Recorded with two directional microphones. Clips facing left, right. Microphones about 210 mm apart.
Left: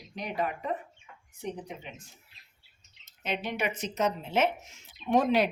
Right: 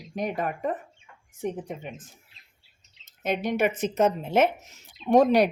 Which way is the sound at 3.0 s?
50° right (ahead or behind).